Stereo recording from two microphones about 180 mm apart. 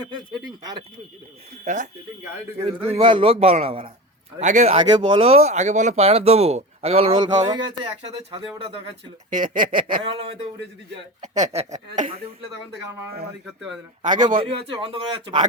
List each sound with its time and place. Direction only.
1.6 s speech: 45° right (ahead or behind)
2.8 s speech: 30° right (ahead or behind)
9.5 s speech: 50° right (ahead or behind)
11.2 s speech: 40° right (ahead or behind)
14.0 s speech: 45° right (ahead or behind)
14.3 s speech: 30° right (ahead or behind)